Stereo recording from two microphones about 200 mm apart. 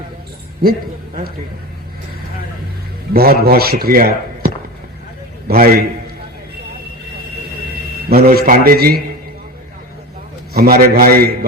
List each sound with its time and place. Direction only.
0.6 s speech: 50° right (ahead or behind)
3.1 s a man's voice: 50° right (ahead or behind)
8.1 s a man's voice: 50° right (ahead or behind)
10.5 s a man's voice: 50° right (ahead or behind)